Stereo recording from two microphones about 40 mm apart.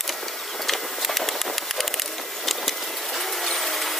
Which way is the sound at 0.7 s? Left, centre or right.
Centre.